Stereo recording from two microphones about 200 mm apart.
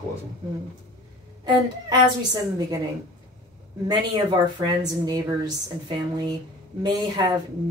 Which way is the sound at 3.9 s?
20° right (ahead or behind).